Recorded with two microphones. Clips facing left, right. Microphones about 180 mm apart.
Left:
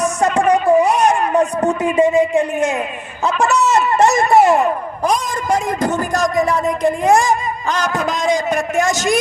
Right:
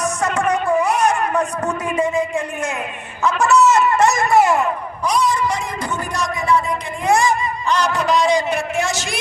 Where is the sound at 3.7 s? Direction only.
25° left (ahead or behind).